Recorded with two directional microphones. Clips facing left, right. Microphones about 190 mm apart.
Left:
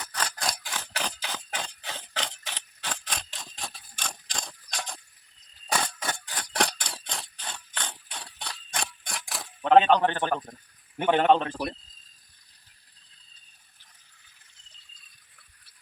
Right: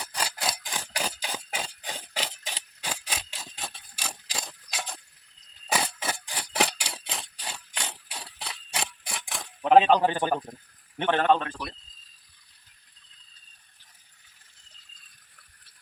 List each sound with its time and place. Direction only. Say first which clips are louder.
0.0 s a sound: even; 10° right (ahead or behind)
10.9 s a man's voice: left 2 dB; 5° left (ahead or behind)
11.2 s speech: left 2 dB; 15° left (ahead or behind)
11.4 s speech: left 5 dB; 35° left (ahead or behind)